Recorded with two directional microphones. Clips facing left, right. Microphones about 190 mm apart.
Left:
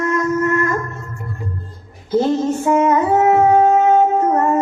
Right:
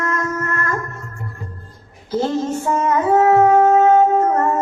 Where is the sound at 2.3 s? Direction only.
20° left (ahead or behind).